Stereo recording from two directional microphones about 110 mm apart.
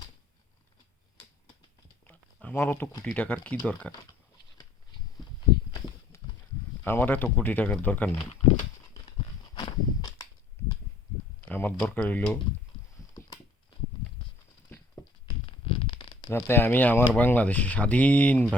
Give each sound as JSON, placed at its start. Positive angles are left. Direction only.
{"t": 2.0, "sound": "a sound", "side_deg": 15}
{"t": 3.0, "sound": "speech", "side_deg": 10}
{"t": 6.8, "sound": "speech", "side_deg": 20}
{"t": 9.6, "sound": "walk", "side_deg": 35}
{"t": 11.3, "sound": "a sound", "side_deg": 15}
{"t": 11.9, "sound": "speech", "side_deg": 15}
{"t": 15.0, "sound": "a sound", "side_deg": 35}
{"t": 15.4, "sound": "zipper", "side_deg": 50}
{"t": 16.3, "sound": "speech", "side_deg": 20}